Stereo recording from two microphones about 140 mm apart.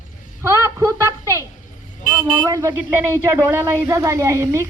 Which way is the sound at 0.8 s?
20° right (ahead or behind).